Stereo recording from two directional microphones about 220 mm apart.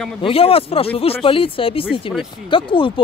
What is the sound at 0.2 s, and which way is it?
Speech, 25° left (ahead or behind).